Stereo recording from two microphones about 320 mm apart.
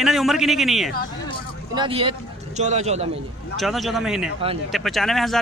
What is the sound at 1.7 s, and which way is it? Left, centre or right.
Speech, centre.